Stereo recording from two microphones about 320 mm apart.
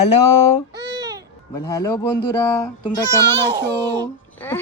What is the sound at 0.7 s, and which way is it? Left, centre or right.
Babbling, right.